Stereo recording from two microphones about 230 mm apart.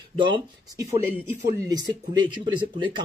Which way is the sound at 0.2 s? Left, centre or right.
Centre.